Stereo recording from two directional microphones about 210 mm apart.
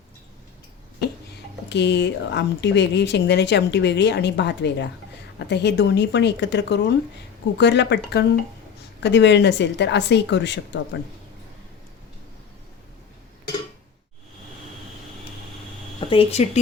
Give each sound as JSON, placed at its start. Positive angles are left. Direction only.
{"t": 1.7, "sound": "speech", "side_deg": 55}
{"t": 16.0, "sound": "speech", "side_deg": 25}